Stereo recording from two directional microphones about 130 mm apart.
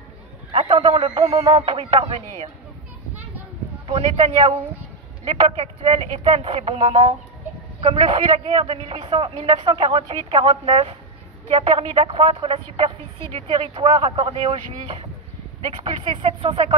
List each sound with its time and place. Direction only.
0.5 s a man's voice: 45° right (ahead or behind)
3.8 s a man's voice: 50° right (ahead or behind)